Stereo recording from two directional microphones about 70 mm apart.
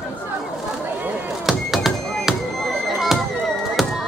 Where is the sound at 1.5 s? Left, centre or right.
Centre.